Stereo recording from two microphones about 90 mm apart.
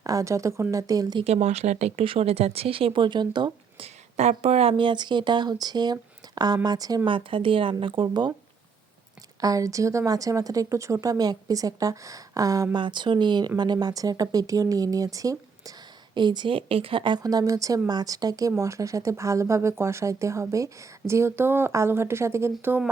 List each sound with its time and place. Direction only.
0.0 s a woman's voice: 40° right (ahead or behind)
2.0 s speech: 90° right; by 7.0 s 45° right (ahead or behind)
7.0 s speech: 75° right (ahead or behind); by 8.3 s 55° right (ahead or behind)
9.4 s a woman's voice: 40° right (ahead or behind)
12.7 s a woman's voice: 60° right (ahead or behind); by 15.7 s 40° right (ahead or behind)
16.1 s speech: 55° right (ahead or behind)
16.6 s speech: 90° right; by 17.2 s 60° right (ahead or behind)
17.2 s a woman's voice: 40° right (ahead or behind)